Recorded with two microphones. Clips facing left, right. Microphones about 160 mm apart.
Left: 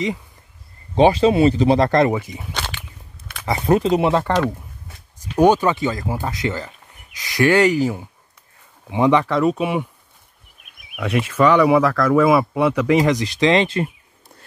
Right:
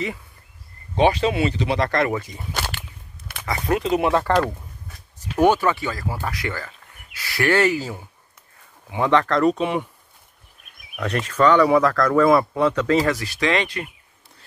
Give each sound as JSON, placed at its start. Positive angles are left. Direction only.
{"t": 0.9, "sound": "speech", "side_deg": 35}
{"t": 2.5, "sound": "whip", "side_deg": -10}
{"t": 3.4, "sound": "speech", "side_deg": 25}
{"t": 5.4, "sound": "speech", "side_deg": 20}
{"t": 11.0, "sound": "speech", "side_deg": 5}